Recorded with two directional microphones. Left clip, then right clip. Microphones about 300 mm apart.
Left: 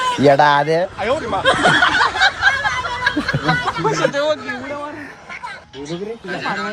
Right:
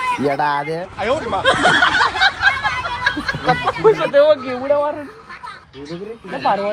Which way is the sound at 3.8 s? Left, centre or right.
Centre.